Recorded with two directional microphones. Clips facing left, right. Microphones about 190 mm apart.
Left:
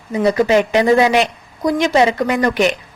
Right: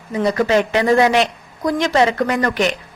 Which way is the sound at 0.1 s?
15° left (ahead or behind).